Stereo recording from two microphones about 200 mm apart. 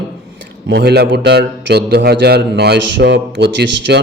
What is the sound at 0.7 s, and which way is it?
A man's voice, 55° right (ahead or behind).